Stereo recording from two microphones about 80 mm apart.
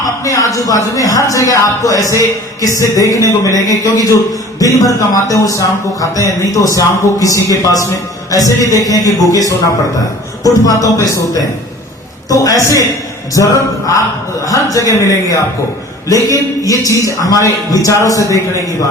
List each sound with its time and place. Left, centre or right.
0.0 s speech: left
10.8 s speech: left